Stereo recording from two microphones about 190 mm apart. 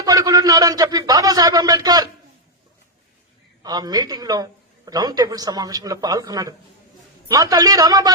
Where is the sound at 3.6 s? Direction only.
20° right (ahead or behind).